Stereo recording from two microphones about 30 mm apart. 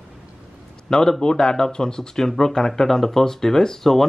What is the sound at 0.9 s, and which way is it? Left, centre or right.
Speech, left.